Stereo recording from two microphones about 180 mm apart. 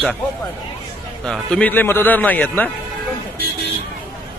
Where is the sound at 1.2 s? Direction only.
5° left (ahead or behind).